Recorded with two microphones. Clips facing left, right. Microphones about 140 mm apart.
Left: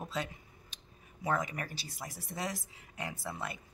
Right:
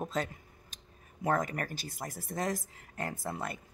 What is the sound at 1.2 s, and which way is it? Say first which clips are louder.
Speech: right 3 dB; 45° right (ahead or behind).